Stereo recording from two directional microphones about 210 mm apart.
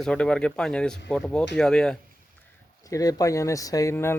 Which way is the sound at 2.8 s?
15° left (ahead or behind).